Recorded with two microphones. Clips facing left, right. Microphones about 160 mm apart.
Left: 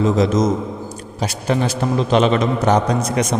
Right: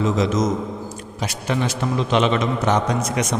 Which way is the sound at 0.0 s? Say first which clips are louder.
Left 4 dB; 35° left (ahead or behind).